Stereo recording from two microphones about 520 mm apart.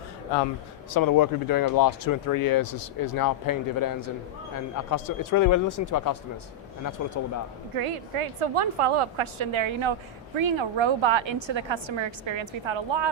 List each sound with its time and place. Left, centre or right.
0.9 s speech: left
7.8 s a woman's voice: right